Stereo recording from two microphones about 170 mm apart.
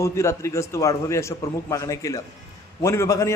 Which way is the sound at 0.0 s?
15° left (ahead or behind).